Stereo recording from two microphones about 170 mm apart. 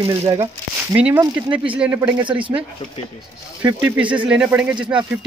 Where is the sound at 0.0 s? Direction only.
35° right (ahead or behind).